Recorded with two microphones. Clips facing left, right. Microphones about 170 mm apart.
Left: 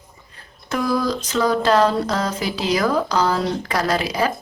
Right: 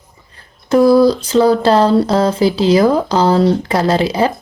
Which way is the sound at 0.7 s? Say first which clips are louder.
Right 12 dB; 35° right (ahead or behind).